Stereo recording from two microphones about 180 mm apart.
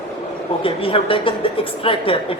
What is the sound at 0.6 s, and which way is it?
Speech, 30° left (ahead or behind).